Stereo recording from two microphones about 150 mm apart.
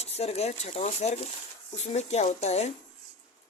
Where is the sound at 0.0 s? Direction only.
45° left (ahead or behind).